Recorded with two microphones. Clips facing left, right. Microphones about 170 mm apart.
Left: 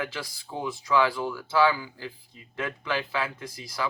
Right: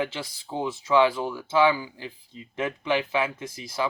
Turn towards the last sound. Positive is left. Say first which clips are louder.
# right 3 dB
turn(degrees=-20)  # may be behind; listen again after turning